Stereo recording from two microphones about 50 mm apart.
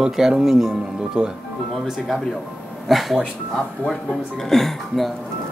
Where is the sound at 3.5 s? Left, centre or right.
Centre.